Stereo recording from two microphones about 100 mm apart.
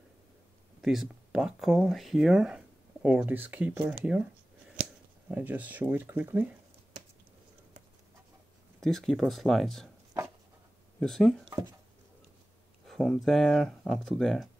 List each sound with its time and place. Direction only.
0.7 s speech: 5° right (ahead or behind)
8.8 s speech: 5° left (ahead or behind)
11.0 s speech: 5° left (ahead or behind)
12.8 s speech: centre (ahead or behind)